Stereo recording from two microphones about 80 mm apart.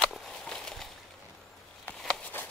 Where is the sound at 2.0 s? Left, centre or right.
Centre.